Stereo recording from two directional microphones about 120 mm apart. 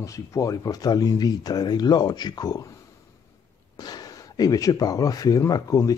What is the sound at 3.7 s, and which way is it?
Speech, 35° left (ahead or behind).